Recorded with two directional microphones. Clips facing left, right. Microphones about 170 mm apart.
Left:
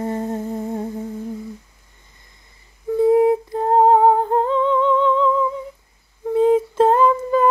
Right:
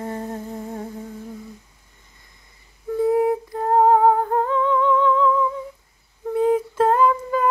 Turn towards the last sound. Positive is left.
turn(degrees=25)  # may be behind; listen again after turning